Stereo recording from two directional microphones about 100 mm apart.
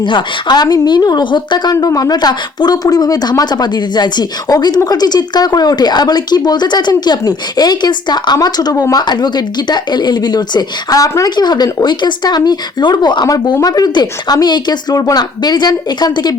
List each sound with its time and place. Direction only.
0.0 s a woman's voice: 55° left (ahead or behind)
1.7 s a woman's voice: 35° left (ahead or behind)
13.2 s a woman's voice: 35° left (ahead or behind)